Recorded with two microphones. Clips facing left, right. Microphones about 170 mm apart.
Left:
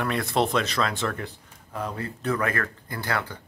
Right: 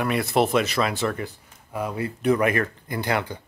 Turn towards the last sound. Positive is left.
turn(degrees=-20)  # may be behind; listen again after turning